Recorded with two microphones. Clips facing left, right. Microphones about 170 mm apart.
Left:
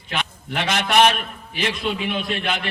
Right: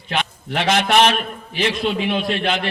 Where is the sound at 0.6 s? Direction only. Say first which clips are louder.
Right 2 dB; 50° right (ahead or behind).